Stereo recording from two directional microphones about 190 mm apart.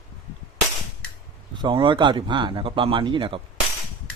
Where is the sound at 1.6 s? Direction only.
25° right (ahead or behind).